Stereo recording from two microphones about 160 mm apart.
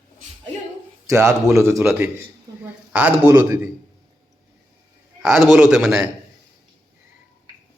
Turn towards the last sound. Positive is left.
turn(degrees=-5)  # may be behind; listen again after turning